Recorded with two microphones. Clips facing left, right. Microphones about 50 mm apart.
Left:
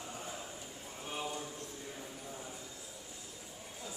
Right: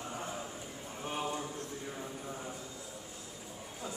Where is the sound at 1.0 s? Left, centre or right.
Right.